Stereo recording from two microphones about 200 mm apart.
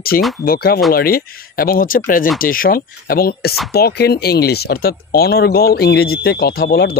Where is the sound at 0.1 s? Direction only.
45° left (ahead or behind).